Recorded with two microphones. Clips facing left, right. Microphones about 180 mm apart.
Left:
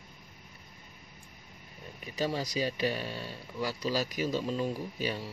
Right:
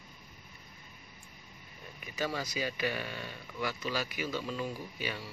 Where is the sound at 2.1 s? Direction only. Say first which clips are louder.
Left 3 dB; 30° left (ahead or behind).